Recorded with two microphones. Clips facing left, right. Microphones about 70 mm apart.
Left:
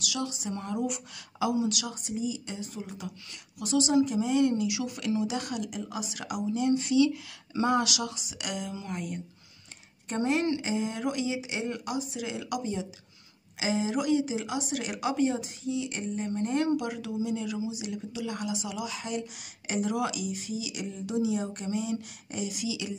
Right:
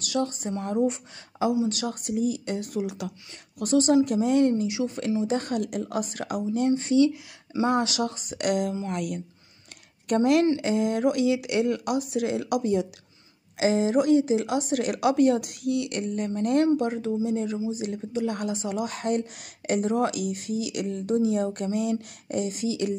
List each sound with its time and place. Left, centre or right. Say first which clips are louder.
0.0 s a woman's voice: right 6 dB; right
2.0 s a woman's voice: right 6 dB; right
3.5 s a woman's voice: right 4 dB; right
8.9 s speech: right 5 dB; right
10.0 s a woman's voice: right 7 dB; right
10.6 s a woman's voice: right 7 dB; right
16.7 s a woman's voice: right 5 dB; right